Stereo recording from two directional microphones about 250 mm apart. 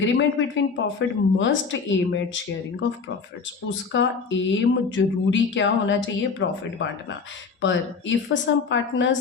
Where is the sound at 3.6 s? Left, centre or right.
Left.